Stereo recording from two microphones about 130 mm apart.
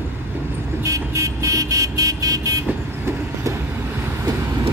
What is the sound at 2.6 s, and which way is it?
Train, 20° right (ahead or behind).